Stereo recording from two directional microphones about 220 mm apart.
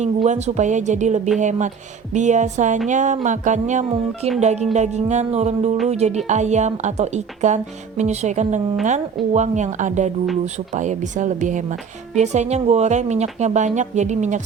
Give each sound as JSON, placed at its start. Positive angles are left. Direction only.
{"t": 0.0, "sound": "speech", "side_deg": -30}